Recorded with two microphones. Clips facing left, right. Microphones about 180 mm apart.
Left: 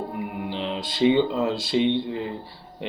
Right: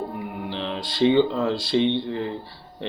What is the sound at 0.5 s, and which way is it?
Speech, 15° left (ahead or behind).